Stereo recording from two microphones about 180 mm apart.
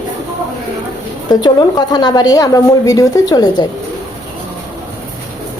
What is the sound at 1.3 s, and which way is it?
A woman's voice, 20° left (ahead or behind).